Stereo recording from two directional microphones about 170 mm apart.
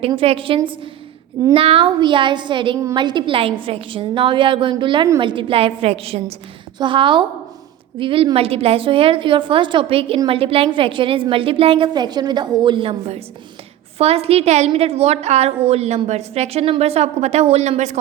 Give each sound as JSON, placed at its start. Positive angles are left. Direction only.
{"t": 0.0, "sound": "a woman's voice", "side_deg": -35}